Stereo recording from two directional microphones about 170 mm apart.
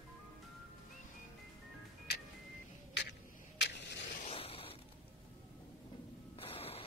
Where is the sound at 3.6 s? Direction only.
90° left.